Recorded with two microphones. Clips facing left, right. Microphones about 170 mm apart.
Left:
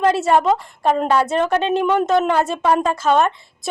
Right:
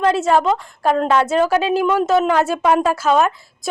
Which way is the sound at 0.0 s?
Centre (ahead or behind).